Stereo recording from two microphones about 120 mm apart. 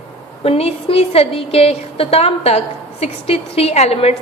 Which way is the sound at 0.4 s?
55° left (ahead or behind).